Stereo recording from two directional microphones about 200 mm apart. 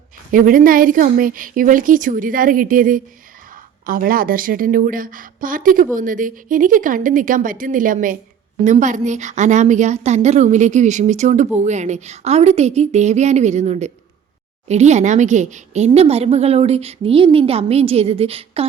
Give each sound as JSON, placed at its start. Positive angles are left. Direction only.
{"t": 0.3, "sound": "a woman's voice", "side_deg": -45}